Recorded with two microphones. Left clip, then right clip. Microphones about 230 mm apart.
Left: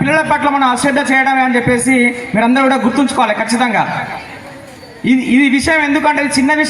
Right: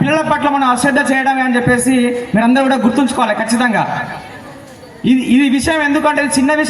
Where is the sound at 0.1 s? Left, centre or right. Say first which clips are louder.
Left 2 dB; right.